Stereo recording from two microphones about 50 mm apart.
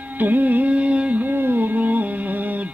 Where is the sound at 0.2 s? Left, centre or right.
Right.